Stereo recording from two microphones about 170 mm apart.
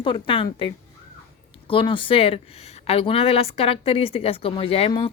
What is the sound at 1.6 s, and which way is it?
A woman's voice, 30° left (ahead or behind).